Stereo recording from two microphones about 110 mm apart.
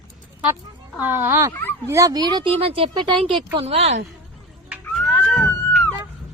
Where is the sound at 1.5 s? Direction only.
20° left (ahead or behind).